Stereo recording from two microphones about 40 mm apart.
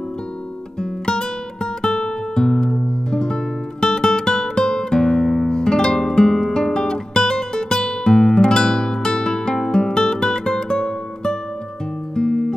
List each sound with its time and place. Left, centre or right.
0.7 s guitar: centre
5.5 s music: centre